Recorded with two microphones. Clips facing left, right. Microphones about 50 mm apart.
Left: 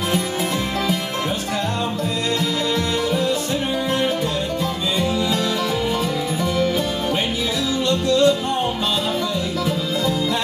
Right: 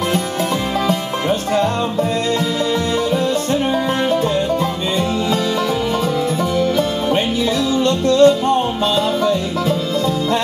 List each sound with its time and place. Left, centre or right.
7.8 s music: right